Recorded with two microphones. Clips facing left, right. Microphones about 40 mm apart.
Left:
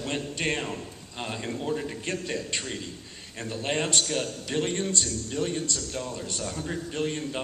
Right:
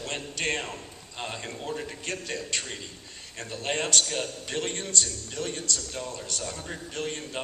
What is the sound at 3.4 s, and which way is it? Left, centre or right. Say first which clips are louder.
A man's voice: left 2 dB; centre.